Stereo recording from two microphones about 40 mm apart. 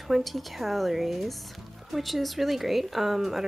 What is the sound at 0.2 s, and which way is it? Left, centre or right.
Speech, centre.